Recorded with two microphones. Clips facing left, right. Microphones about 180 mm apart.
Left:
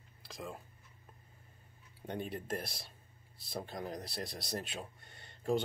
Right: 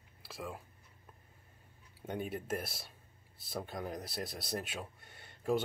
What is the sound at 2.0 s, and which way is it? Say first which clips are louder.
Speech: right 1 dB; 5° right (ahead or behind).